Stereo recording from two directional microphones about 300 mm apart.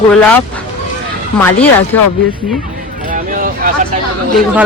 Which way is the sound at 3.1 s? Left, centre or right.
Right.